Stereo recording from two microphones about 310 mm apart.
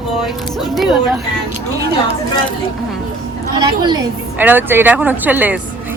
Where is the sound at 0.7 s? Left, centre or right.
Centre.